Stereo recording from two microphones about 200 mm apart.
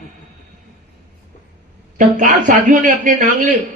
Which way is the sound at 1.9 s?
40° right (ahead or behind).